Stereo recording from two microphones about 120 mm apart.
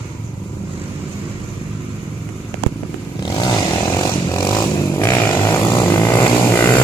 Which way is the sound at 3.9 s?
30° left (ahead or behind).